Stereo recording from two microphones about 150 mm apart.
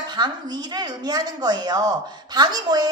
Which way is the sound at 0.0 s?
30° right (ahead or behind).